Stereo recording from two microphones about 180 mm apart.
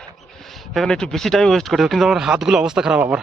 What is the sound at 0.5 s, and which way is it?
Speech, centre (ahead or behind).